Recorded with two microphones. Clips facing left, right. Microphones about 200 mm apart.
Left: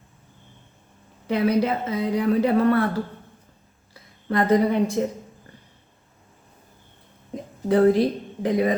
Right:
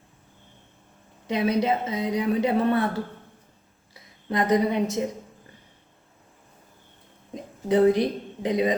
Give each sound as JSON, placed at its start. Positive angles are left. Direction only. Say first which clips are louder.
{"t": 1.3, "sound": "a woman's voice", "louder": "left 2 dB", "side_deg": -20}
{"t": 4.3, "sound": "a woman's voice", "louder": "left 3 dB", "side_deg": -20}
{"t": 7.7, "sound": "a woman's voice", "louder": "left 2 dB", "side_deg": -20}